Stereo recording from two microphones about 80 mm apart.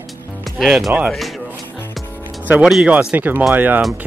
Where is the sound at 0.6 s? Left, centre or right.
Centre.